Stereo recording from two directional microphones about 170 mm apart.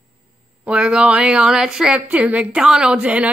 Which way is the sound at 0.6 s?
5° right (ahead or behind).